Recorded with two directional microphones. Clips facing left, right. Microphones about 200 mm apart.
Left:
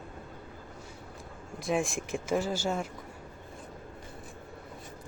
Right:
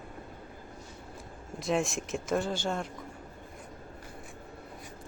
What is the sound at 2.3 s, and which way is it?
Speech, 5° left (ahead or behind).